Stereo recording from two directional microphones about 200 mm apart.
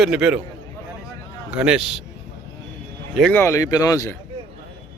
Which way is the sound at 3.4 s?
15° left (ahead or behind).